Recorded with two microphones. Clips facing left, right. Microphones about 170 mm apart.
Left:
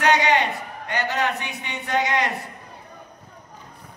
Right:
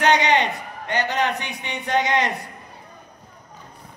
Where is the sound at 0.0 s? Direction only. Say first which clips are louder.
Right 1 dB; 25° right (ahead or behind).